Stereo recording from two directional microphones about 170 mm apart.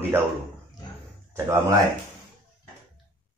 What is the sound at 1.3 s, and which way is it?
Speech, 15° right (ahead or behind).